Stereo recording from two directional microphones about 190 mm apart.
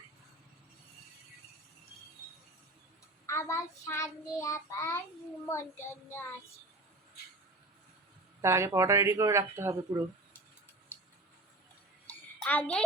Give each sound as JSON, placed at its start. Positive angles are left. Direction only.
{"t": 3.2, "sound": "child singing", "side_deg": 15}
{"t": 8.4, "sound": "speech", "side_deg": -15}
{"t": 12.0, "sound": "a sound", "side_deg": 10}